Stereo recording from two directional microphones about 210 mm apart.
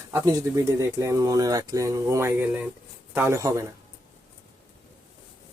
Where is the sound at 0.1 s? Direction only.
15° right (ahead or behind).